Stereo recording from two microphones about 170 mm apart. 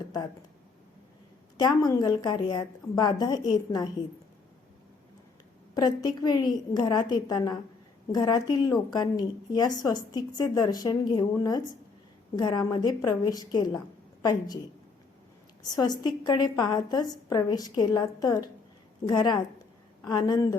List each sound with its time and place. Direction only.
1.5 s a woman's voice: 25° left (ahead or behind)
5.7 s a woman's voice: 25° left (ahead or behind)
15.7 s a woman's voice: 25° left (ahead or behind)